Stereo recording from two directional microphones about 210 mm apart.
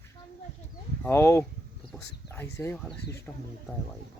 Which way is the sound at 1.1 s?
10° left (ahead or behind).